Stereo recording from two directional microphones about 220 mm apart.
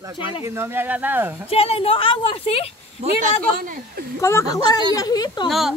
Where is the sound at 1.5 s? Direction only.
25° left (ahead or behind).